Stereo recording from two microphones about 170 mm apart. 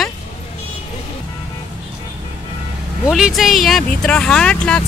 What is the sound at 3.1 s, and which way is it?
Speech, centre (ahead or behind).